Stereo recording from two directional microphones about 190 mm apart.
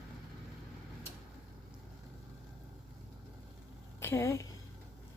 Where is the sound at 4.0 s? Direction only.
15° left (ahead or behind).